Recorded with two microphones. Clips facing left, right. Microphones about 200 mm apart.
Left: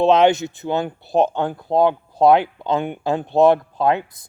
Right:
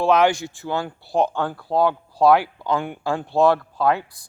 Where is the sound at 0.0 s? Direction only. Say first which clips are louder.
Left 3 dB; 20° left (ahead or behind).